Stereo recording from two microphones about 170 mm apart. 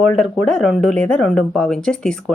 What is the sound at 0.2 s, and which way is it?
A woman's voice, centre (ahead or behind).